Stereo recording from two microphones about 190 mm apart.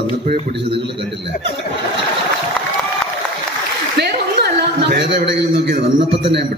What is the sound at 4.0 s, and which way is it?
A man's voice, 60° right (ahead or behind).